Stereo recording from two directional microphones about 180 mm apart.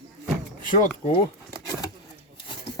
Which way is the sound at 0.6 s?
45° left (ahead or behind).